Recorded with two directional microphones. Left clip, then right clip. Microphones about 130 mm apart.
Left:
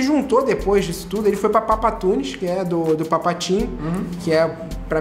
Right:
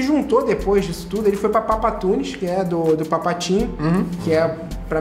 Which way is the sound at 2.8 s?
Centre (ahead or behind).